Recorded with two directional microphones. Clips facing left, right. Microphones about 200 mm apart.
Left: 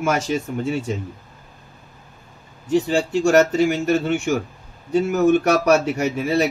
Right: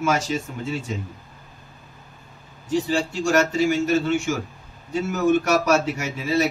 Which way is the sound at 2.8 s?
60° left (ahead or behind).